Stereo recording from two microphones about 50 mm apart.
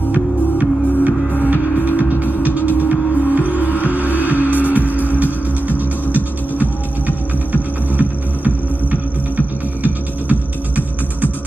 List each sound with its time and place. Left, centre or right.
0.6 s music: right
8.5 s throbbing: left